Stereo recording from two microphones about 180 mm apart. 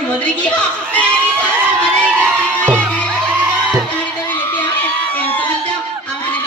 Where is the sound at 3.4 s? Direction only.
5° right (ahead or behind); by 4.6 s 10° left (ahead or behind).